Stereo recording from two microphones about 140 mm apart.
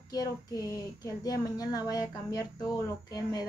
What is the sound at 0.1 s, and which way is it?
Speech, 25° left (ahead or behind).